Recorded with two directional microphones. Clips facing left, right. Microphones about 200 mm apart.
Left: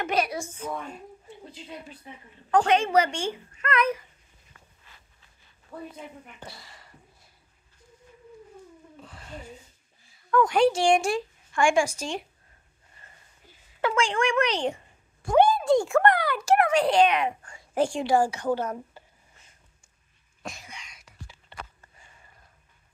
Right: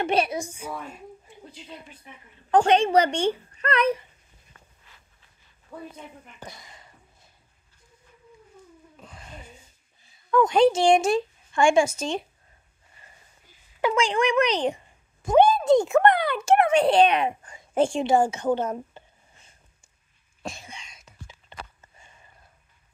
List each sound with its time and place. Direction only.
0.0 s speech: 30° right (ahead or behind)
0.4 s a child's voice: 10° right (ahead or behind)
2.5 s speech: 30° right (ahead or behind)
6.4 s speech: 20° right (ahead or behind)
9.0 s a sound: 15° right (ahead or behind)
10.3 s speech: 20° right (ahead or behind)
13.7 s a child's voice: 15° right (ahead or behind)
20.4 s a sound: 25° right (ahead or behind)